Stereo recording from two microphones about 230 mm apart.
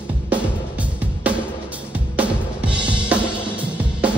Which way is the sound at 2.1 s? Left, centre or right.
Centre.